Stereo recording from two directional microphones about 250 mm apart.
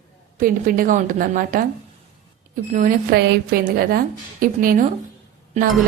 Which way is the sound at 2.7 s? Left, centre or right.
Right.